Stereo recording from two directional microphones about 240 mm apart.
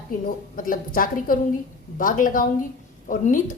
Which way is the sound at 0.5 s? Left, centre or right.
Left.